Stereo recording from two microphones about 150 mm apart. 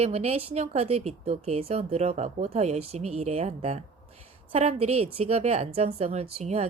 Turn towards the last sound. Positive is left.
turn(degrees=-45)  # may be behind; listen again after turning